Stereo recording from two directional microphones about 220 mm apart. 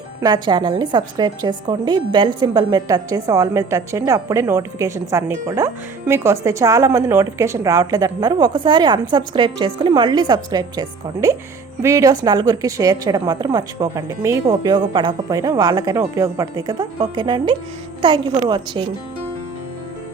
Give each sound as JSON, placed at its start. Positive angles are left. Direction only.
{"t": 0.2, "sound": "a woman's voice", "side_deg": -20}